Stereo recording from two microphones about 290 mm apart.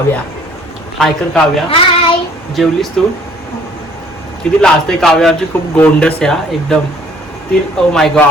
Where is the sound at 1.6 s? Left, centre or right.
Centre.